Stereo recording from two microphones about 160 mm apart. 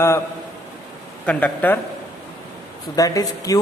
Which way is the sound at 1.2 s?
5° left (ahead or behind).